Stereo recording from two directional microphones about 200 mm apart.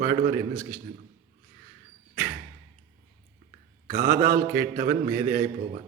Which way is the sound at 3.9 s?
50° right (ahead or behind).